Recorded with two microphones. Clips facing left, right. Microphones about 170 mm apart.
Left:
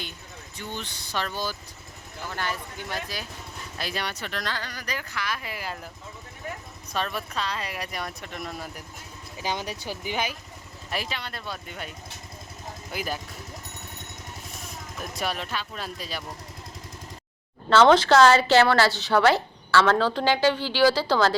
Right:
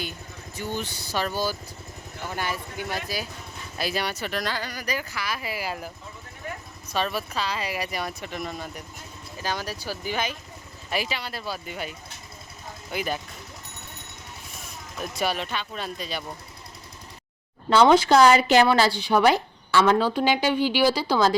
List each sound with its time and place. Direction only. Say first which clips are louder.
0.5 s a woman's voice: right 5 dB; 5° right (ahead or behind)
6.9 s speech: right 3 dB; 5° right (ahead or behind)
9.4 s speech: even; 20° left (ahead or behind)
10.9 s speech: right 3 dB; 5° right (ahead or behind)
15.0 s speech: right 4 dB; centre (ahead or behind)
17.7 s a woman's voice: even; 10° right (ahead or behind)